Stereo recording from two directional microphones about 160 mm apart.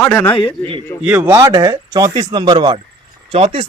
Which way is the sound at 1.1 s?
20° right (ahead or behind).